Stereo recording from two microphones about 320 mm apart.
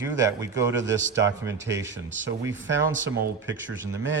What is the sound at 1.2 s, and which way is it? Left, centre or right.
Speech, centre.